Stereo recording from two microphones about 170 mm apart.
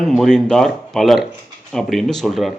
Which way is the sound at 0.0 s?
Centre (ahead or behind).